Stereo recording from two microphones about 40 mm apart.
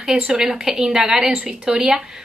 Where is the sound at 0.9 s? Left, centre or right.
Right.